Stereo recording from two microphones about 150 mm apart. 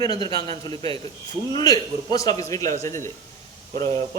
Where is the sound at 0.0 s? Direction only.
25° left (ahead or behind).